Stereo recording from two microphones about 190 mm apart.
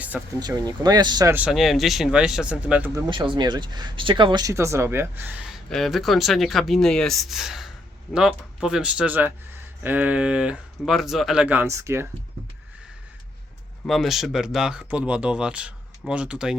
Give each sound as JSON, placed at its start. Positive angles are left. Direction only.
{"t": 0.3, "sound": "speech", "side_deg": -20}
{"t": 1.5, "sound": "speech", "side_deg": 0}
{"t": 2.9, "sound": "speech", "side_deg": -25}
{"t": 13.8, "sound": "speech", "side_deg": 0}